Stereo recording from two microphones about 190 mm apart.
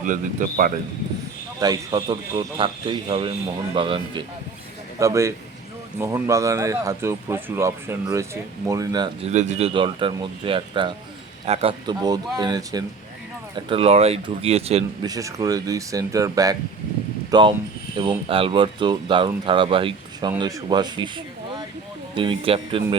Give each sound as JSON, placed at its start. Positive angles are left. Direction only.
{"t": 0.0, "sound": "speech", "side_deg": -45}
{"t": 1.5, "sound": "speech", "side_deg": -20}
{"t": 4.9, "sound": "speech", "side_deg": -15}
{"t": 9.2, "sound": "speech", "side_deg": -40}
{"t": 13.7, "sound": "speech", "side_deg": -30}
{"t": 15.0, "sound": "speech", "side_deg": -20}
{"t": 22.1, "sound": "speech", "side_deg": -25}